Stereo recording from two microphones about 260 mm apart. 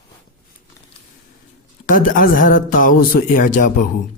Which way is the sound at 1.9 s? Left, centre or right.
Left.